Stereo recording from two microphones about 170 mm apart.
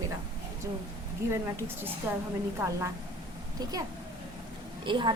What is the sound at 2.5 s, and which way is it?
A woman's voice, 20° right (ahead or behind).